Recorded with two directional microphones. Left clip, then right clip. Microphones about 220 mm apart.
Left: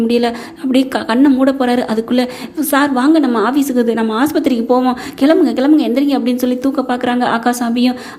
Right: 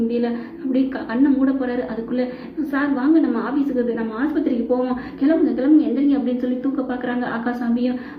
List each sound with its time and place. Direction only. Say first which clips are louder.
0.7 s a woman's voice: left 8 dB; 50° left (ahead or behind)